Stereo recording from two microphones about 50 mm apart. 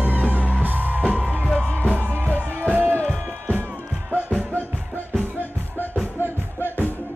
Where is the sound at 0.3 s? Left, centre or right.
Right.